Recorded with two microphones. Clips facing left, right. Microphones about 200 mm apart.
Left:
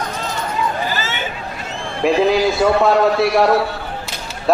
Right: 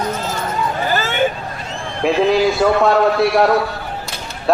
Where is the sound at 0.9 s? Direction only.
50° right (ahead or behind).